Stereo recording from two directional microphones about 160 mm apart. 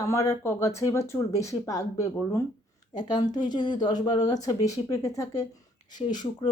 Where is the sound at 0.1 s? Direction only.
20° left (ahead or behind).